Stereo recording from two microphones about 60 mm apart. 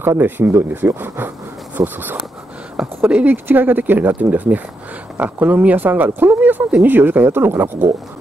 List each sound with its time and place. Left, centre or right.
0.2 s speech: right
3.1 s speech: right
3.4 s speech: right